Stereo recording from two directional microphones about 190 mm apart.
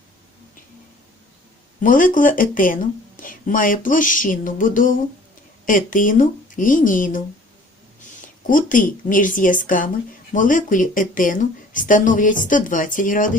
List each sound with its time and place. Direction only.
1.8 s speech: 45° left (ahead or behind)
8.4 s speech: 45° left (ahead or behind)